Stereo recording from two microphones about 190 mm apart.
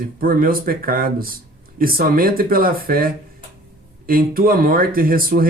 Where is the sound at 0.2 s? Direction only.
50° right (ahead or behind).